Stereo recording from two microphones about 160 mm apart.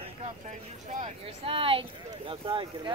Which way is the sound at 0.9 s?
50° right (ahead or behind).